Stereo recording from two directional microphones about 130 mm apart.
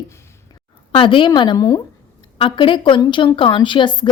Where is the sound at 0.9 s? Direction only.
40° left (ahead or behind).